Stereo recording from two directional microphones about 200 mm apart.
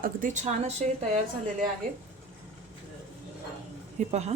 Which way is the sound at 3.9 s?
35° right (ahead or behind).